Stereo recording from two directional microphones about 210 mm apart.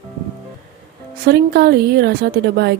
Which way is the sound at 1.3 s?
50° right (ahead or behind).